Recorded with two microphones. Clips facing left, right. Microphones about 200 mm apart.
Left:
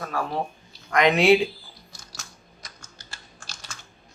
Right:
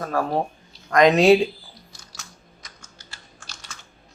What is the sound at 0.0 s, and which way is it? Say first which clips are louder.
Speech: right 5 dB; 45° right (ahead or behind).